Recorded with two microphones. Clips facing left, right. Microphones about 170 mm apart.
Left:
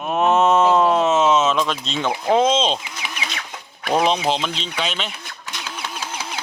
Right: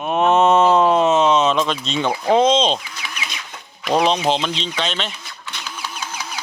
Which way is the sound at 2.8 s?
20° left (ahead or behind).